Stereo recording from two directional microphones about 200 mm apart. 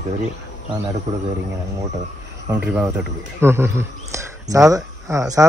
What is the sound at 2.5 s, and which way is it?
Speech, 10° right (ahead or behind).